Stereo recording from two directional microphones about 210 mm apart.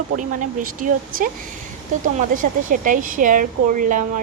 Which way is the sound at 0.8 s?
40° right (ahead or behind).